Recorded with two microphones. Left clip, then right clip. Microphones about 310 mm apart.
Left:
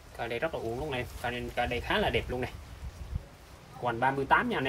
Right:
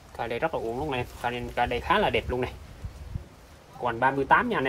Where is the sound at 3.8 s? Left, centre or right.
Centre.